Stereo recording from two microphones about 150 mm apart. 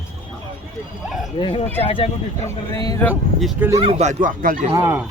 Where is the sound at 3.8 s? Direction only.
40° right (ahead or behind); by 4.6 s 60° right (ahead or behind).